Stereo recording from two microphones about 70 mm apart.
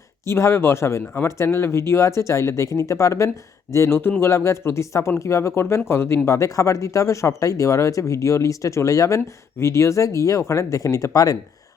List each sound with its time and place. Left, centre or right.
0.3 s speech: left